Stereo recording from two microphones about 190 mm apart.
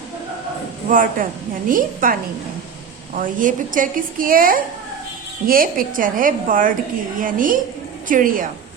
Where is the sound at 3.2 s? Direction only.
45° right (ahead or behind).